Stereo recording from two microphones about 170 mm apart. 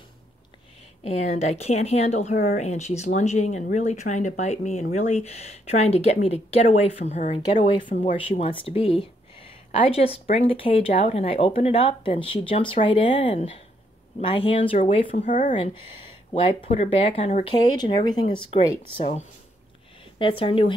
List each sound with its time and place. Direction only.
1.0 s speech: 40° left (ahead or behind)
7.5 s speech: 30° left (ahead or behind)
7.9 s speech: 40° left (ahead or behind)
15.2 s speech: 50° left (ahead or behind)
16.3 s speech: 35° left (ahead or behind)